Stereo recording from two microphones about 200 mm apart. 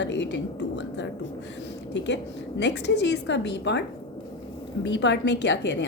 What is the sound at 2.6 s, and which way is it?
A woman's voice, 60° left (ahead or behind).